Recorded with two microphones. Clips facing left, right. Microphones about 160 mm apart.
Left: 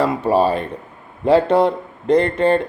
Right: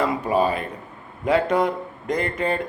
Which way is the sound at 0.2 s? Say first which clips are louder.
Left 5 dB; 30° left (ahead or behind).